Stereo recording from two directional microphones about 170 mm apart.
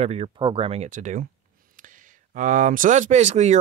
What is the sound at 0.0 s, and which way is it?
Speech, 40° right (ahead or behind).